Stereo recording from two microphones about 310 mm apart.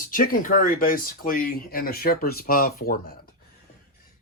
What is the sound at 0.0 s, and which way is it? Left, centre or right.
Speech, left.